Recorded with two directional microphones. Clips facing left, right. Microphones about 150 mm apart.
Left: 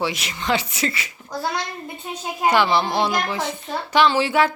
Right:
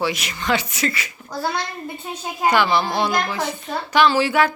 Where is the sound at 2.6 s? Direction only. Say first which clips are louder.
Left 1 dB; 25° left (ahead or behind).